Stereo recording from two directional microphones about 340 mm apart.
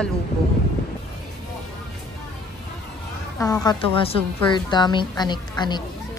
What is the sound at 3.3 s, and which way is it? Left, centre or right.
A child's voice, centre.